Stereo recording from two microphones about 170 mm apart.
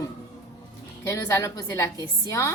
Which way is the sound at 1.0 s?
20° left (ahead or behind).